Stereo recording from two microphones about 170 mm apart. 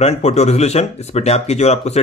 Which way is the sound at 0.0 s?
40° left (ahead or behind).